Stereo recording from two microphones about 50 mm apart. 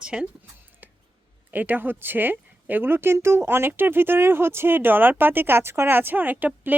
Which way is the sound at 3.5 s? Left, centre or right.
Right.